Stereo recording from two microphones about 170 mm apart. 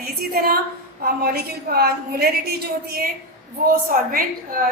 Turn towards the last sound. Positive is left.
turn(degrees=-55)  # may be behind; listen again after turning